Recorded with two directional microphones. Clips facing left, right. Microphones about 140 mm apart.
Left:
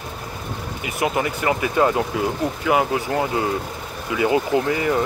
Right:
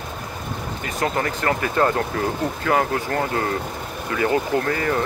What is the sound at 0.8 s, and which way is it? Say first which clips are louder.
Speech: left 1 dB; 10° left (ahead or behind).